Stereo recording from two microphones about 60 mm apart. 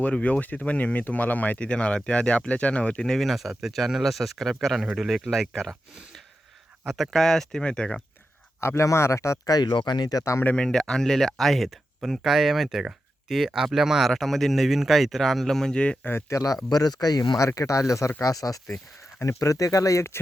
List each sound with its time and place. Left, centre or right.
0.0 s speech: left
3.1 s speech: centre
4.8 s speech: centre
5.0 s speech: centre
6.9 s speech: centre
8.6 s speech: left
9.5 s speech: left
10.5 s speech: centre
16.3 s speech: left
16.7 s speech: left
18.2 s speech: left